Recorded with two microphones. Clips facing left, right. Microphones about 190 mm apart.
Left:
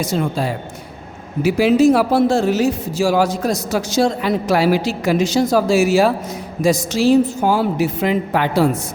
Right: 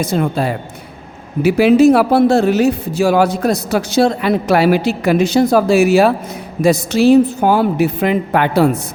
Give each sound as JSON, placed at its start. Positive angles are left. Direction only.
{"t": 0.0, "sound": "speech", "side_deg": -60}